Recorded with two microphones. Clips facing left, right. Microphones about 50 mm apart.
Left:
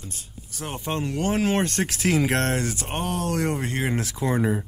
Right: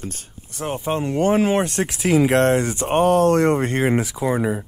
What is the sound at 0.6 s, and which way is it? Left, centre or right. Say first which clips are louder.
Speech: right 6 dB; right.